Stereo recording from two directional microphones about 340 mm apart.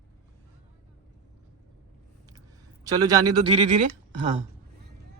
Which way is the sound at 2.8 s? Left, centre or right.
Centre.